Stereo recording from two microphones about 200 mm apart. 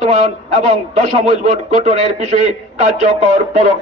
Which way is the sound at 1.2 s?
35° right (ahead or behind).